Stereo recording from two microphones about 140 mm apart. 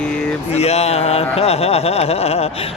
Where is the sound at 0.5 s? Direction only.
50° left (ahead or behind).